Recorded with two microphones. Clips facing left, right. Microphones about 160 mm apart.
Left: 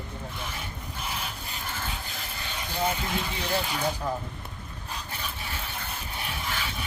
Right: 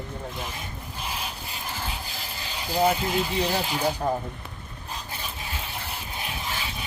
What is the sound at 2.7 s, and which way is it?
Speech, 30° right (ahead or behind).